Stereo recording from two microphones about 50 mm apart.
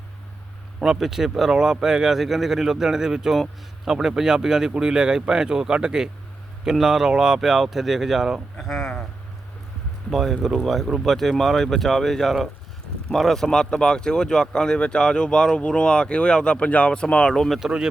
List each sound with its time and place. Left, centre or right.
0.8 s speech: centre
8.5 s speech: centre
10.1 s speech: centre